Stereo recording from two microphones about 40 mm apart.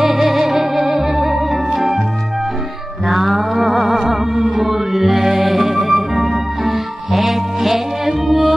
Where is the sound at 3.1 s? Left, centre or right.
Centre.